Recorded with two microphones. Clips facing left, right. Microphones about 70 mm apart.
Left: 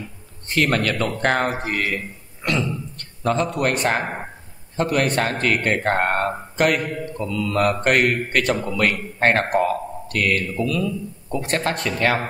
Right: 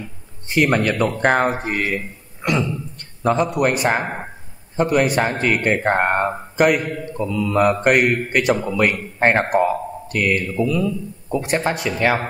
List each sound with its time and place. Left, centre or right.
0.5 s a man's voice: centre